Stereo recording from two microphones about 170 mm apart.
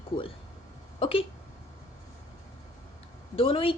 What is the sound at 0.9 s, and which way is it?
Speech, 35° left (ahead or behind).